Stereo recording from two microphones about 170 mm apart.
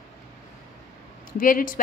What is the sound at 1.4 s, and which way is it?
Speech, 55° left (ahead or behind).